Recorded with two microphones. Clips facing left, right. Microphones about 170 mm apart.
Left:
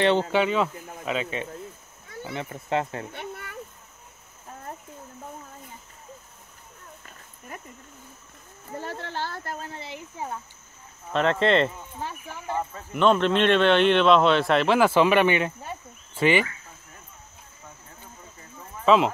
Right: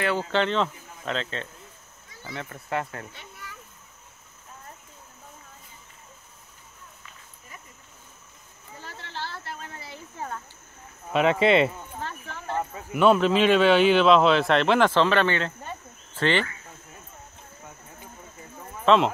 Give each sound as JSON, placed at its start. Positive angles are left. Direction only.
{"t": 0.0, "sound": "speech", "side_deg": 25}
{"t": 0.3, "sound": "speech", "side_deg": 10}
{"t": 3.1, "sound": "a sound", "side_deg": 60}
{"t": 7.1, "sound": "a sound", "side_deg": 55}
{"t": 8.7, "sound": "a sound", "side_deg": 50}
{"t": 9.7, "sound": "speech", "side_deg": 25}
{"t": 11.1, "sound": "speech", "side_deg": -10}
{"t": 12.0, "sound": "speech", "side_deg": 10}
{"t": 12.7, "sound": "a man's voice", "side_deg": -5}
{"t": 18.9, "sound": "a man's voice", "side_deg": 5}